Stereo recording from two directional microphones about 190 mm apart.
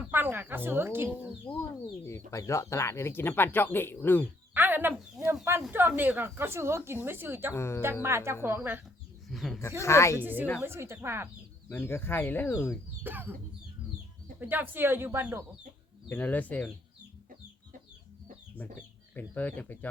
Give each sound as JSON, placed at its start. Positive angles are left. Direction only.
{"t": 0.0, "sound": "a woman's voice", "side_deg": -10}
{"t": 2.0, "sound": "speech", "side_deg": 15}
{"t": 4.5, "sound": "a woman's voice", "side_deg": -10}
{"t": 7.5, "sound": "speech", "side_deg": 15}
{"t": 8.0, "sound": "a woman's voice", "side_deg": -15}
{"t": 9.3, "sound": "speech", "side_deg": 0}
{"t": 9.6, "sound": "speech", "side_deg": 15}
{"t": 10.2, "sound": "a woman's voice", "side_deg": -10}
{"t": 11.7, "sound": "speech", "side_deg": 10}
{"t": 13.0, "sound": "a woman's voice", "side_deg": -10}
{"t": 14.3, "sound": "a woman's voice", "side_deg": -10}
{"t": 16.0, "sound": "speech", "side_deg": 10}
{"t": 18.5, "sound": "speech", "side_deg": 10}